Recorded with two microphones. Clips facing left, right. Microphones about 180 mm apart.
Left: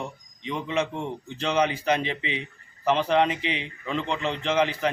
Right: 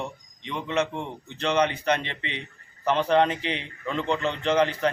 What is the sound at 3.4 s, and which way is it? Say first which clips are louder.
Speech: left 1 dB; 90° left.